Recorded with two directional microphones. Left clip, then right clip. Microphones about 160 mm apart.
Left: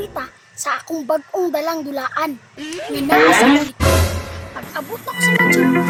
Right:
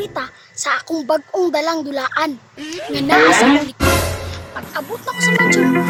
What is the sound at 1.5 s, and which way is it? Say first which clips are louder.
Speech: right 2 dB; 40° right (ahead or behind).